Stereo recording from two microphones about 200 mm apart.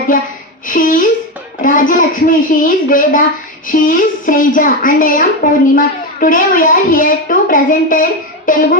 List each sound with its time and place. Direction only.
0.7 s speech: 45° left (ahead or behind)